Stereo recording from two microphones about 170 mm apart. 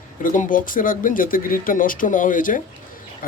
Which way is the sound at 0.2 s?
50° left (ahead or behind).